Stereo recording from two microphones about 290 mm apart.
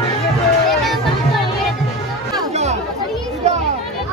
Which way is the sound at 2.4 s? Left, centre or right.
Right.